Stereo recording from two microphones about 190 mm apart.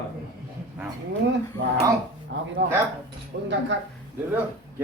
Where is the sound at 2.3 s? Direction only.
70° right (ahead or behind).